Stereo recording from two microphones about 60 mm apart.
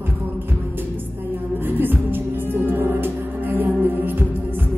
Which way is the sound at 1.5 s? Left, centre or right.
Right.